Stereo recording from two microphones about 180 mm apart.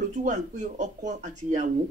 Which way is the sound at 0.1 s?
45° right (ahead or behind).